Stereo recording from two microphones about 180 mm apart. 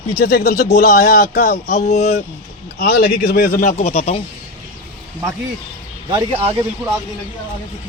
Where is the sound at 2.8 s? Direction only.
55° left (ahead or behind).